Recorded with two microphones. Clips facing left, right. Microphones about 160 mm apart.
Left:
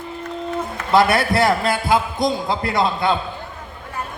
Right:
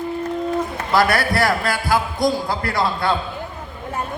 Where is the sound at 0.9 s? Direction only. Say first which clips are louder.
Left 2 dB; 25° left (ahead or behind).